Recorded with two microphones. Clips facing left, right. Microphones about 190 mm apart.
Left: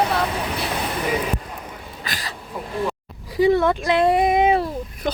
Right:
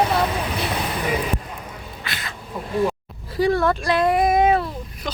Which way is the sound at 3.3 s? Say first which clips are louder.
Left 2 dB; 20° left (ahead or behind).